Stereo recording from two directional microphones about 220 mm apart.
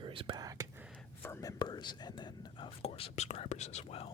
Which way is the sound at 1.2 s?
15° left (ahead or behind).